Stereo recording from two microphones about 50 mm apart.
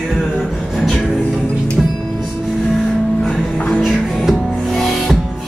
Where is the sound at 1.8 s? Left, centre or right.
Centre.